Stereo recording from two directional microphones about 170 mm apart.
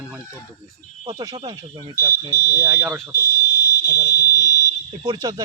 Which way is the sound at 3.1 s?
70° left (ahead or behind).